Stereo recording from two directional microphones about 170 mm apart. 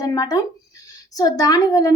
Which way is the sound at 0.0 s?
20° left (ahead or behind).